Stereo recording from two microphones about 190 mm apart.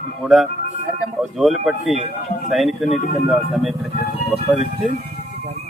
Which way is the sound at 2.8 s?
35° left (ahead or behind).